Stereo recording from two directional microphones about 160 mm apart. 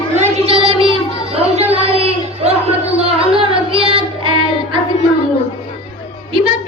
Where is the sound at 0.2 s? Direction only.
40° right (ahead or behind).